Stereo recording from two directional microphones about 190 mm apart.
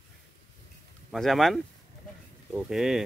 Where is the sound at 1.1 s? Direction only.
Centre (ahead or behind).